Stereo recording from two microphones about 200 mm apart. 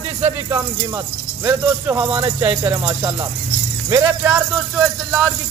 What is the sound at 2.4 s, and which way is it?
Speech, 20° right (ahead or behind).